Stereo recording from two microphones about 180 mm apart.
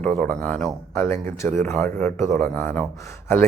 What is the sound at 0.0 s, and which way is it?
Speech, 10° left (ahead or behind).